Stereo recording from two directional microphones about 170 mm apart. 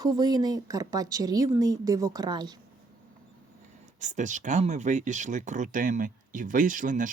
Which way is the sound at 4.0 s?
45° right (ahead or behind).